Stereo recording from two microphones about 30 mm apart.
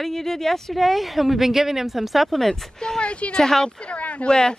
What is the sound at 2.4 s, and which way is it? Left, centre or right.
Speech, centre.